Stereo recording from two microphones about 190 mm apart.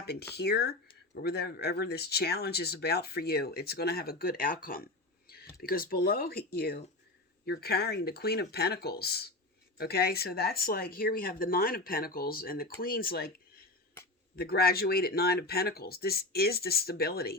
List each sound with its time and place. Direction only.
0.0 s speech: 55° left (ahead or behind)
14.3 s speech: 55° left (ahead or behind)